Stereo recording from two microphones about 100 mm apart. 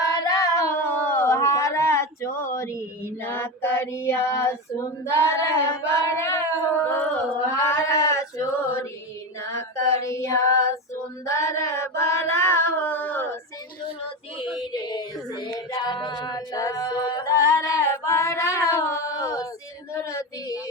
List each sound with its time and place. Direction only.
0.1 s a sound: 40° left (ahead or behind)
5.0 s singing: 30° left (ahead or behind)
7.6 s female singing: 30° left (ahead or behind)
14.7 s child singing: 45° left (ahead or behind)
19.9 s female singing: 30° left (ahead or behind)